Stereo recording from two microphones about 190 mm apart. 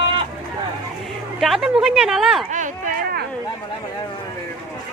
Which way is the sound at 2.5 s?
40° right (ahead or behind).